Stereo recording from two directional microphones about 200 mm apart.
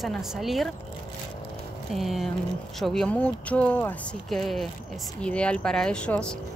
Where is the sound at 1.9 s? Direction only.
Centre (ahead or behind).